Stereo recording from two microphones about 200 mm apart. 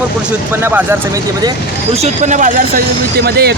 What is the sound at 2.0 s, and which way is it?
Speech, 35° right (ahead or behind).